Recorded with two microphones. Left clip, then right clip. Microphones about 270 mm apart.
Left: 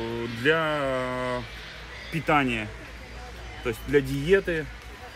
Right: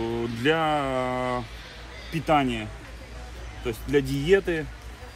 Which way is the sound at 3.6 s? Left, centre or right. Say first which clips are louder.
Left 1 dB; centre.